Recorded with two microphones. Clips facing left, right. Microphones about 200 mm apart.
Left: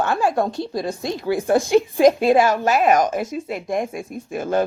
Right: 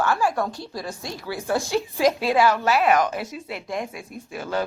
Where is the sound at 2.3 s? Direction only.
45° left (ahead or behind).